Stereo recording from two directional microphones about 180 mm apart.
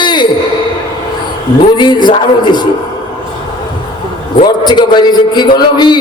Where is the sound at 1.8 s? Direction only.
25° left (ahead or behind).